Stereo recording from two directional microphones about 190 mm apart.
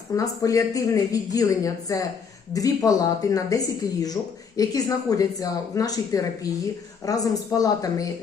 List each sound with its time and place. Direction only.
0.1 s speech: 15° left (ahead or behind)